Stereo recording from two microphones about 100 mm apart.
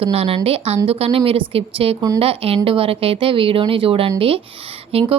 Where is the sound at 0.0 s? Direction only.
80° right.